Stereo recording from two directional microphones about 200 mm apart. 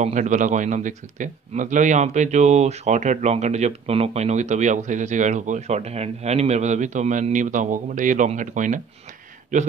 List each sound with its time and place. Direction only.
0.0 s speech: 40° right (ahead or behind)